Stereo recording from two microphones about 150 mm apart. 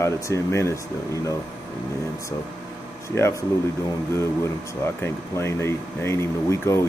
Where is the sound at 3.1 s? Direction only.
20° left (ahead or behind).